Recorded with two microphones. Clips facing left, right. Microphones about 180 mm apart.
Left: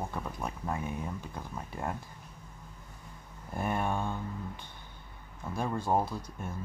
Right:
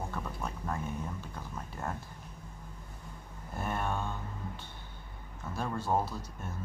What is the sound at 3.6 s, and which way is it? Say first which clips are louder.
Speech: left 3 dB; 15° left (ahead or behind).